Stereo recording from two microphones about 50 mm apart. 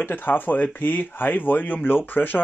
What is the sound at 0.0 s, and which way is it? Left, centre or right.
Speech, left.